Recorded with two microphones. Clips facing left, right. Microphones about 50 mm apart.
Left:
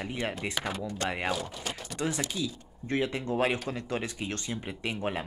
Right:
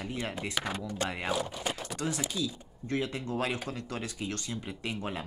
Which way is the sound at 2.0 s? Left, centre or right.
Centre.